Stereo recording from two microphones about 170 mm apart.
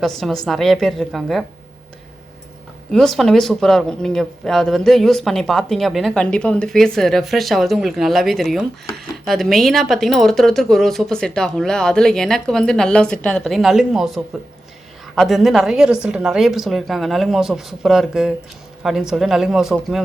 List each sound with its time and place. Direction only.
0.0 s speech: centre (ahead or behind)
2.9 s speech: centre (ahead or behind)